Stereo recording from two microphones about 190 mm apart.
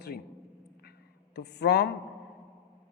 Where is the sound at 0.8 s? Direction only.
60° left (ahead or behind).